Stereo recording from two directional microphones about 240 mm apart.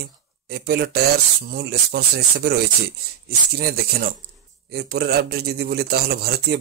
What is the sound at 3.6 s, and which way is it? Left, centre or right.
A man's voice, right.